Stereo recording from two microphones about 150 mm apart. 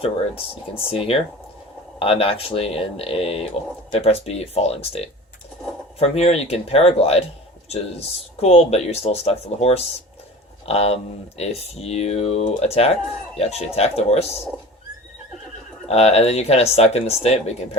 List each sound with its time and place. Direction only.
0.9 s a man's voice: 40° left (ahead or behind)
15.9 s speech: 45° left (ahead or behind)